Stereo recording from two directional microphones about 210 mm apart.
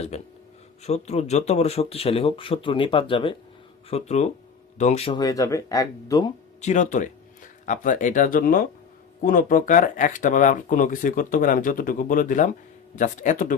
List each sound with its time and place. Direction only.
0.1 s speech: 30° left (ahead or behind)
6.6 s speech: 35° left (ahead or behind)